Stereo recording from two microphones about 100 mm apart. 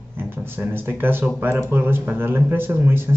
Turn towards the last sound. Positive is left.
turn(degrees=-20)  # may be behind; listen again after turning